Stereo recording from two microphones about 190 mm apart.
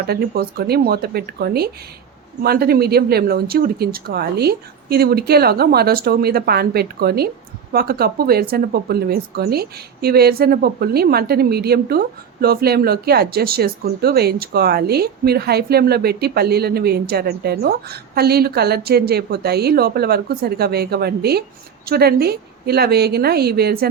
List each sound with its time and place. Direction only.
0.1 s speech: 55° right (ahead or behind)